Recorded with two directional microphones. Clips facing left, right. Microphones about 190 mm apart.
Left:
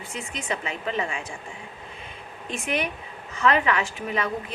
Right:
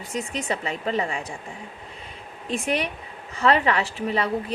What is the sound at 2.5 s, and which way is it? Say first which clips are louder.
A woman's voice: right 3 dB; 35° right (ahead or behind).